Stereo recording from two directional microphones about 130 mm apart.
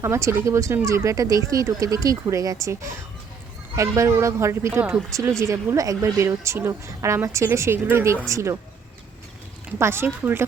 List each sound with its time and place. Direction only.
0.0 s speech: 20° right (ahead or behind)
3.8 s speech: 25° right (ahead or behind)
9.7 s speech: 20° right (ahead or behind)